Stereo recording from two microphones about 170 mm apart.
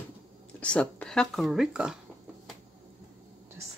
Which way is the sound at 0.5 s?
5° left (ahead or behind).